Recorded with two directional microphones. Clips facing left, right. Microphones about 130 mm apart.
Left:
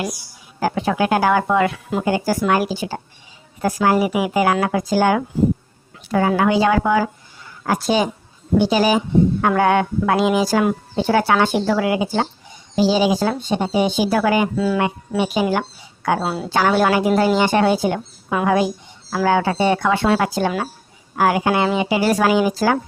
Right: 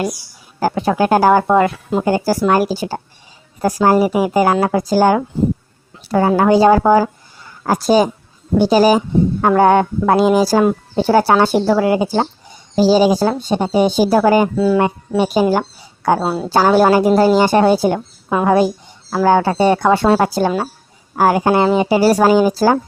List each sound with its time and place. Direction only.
0.6 s speech: 40° right (ahead or behind)